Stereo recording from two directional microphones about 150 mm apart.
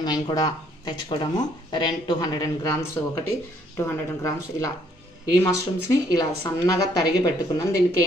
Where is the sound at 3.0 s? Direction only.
15° left (ahead or behind).